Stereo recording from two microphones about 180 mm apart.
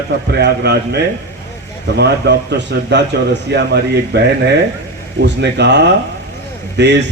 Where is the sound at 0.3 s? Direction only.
65° right (ahead or behind).